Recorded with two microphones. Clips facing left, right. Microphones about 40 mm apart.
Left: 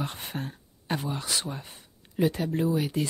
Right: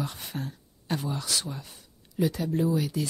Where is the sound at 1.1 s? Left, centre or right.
Left.